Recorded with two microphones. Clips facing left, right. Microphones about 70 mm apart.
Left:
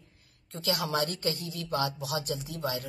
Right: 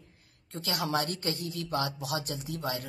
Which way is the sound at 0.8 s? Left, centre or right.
Right.